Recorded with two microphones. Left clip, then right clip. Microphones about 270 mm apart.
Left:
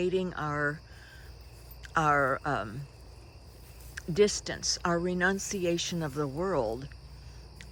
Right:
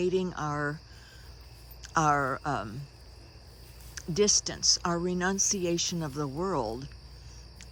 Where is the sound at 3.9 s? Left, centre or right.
Centre.